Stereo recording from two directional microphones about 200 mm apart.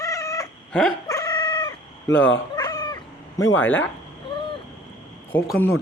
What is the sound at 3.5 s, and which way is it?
Speech, 10° left (ahead or behind).